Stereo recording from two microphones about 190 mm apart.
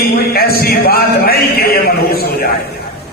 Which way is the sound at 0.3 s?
55° left (ahead or behind).